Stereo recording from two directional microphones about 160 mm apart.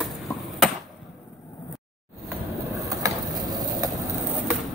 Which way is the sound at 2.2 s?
20° right (ahead or behind).